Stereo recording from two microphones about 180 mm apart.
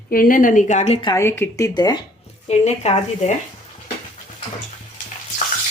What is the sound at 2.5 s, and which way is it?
Speech, 40° left (ahead or behind).